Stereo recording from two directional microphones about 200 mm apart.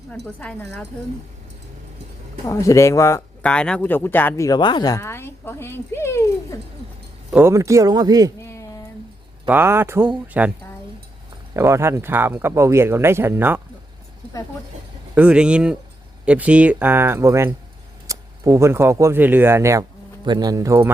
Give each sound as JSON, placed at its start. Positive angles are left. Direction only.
{"t": 0.3, "sound": "speech", "side_deg": 5}
{"t": 2.5, "sound": "speech", "side_deg": 15}
{"t": 7.3, "sound": "speech", "side_deg": -10}
{"t": 8.4, "sound": "a sound", "side_deg": 15}
{"t": 9.5, "sound": "speech", "side_deg": -10}
{"t": 11.5, "sound": "speech", "side_deg": -15}
{"t": 15.1, "sound": "speech", "side_deg": -5}